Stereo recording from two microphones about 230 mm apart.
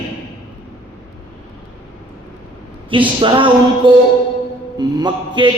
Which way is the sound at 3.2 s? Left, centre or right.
Right.